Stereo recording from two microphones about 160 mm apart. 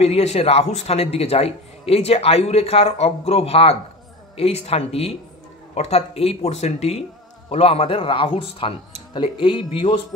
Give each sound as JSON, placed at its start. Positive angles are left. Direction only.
{"t": 0.0, "sound": "a man's voice", "side_deg": 40}